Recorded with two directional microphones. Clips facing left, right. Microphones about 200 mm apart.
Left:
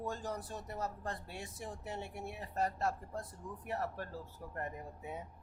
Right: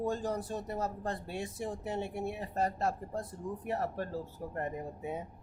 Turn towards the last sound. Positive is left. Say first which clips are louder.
# right 7 dB
turn(degrees=-20)  # may be behind; listen again after turning